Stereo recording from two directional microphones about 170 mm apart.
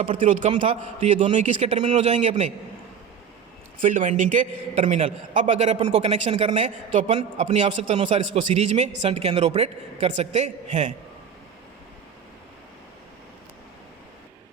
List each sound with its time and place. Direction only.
0.3 s speech: 45° right (ahead or behind)
3.8 s a man's voice: 50° right (ahead or behind)